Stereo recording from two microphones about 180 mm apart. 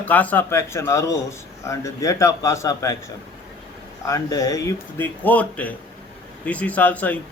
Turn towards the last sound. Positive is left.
turn(degrees=10)  # may be behind; listen again after turning